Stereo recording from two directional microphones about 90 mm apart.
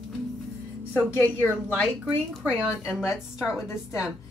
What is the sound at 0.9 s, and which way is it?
Speech, 20° left (ahead or behind).